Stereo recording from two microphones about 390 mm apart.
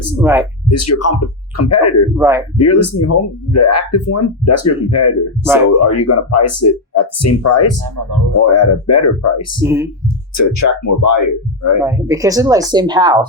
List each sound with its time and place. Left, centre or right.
0.2 s speech: centre
0.7 s speech: left
2.1 s speech: centre
2.6 s speech: left
9.6 s speech: centre
10.3 s speech: left
11.8 s speech: centre